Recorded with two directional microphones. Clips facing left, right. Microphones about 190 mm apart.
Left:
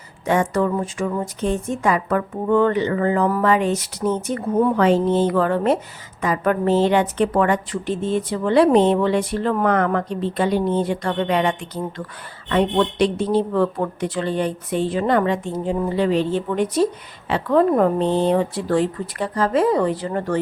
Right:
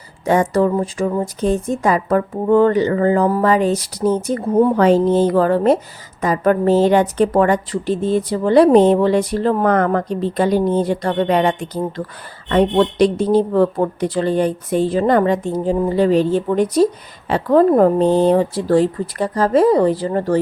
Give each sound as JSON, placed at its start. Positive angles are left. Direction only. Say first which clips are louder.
{"t": 0.3, "sound": "speech", "louder": "right 4 dB", "side_deg": -35}